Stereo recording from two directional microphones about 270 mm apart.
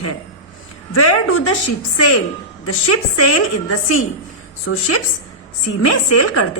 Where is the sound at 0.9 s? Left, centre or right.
Left.